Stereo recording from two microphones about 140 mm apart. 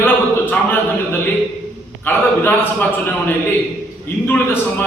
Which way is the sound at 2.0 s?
15° left (ahead or behind).